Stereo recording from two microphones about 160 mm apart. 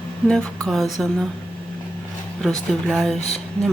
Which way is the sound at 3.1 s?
45° left (ahead or behind).